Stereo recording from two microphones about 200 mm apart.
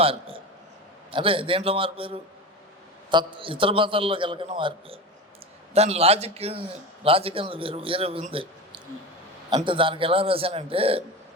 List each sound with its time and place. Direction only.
0.0 s a man's voice: 30° right (ahead or behind)